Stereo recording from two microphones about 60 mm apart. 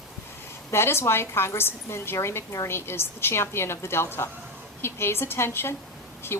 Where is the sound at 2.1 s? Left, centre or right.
Left.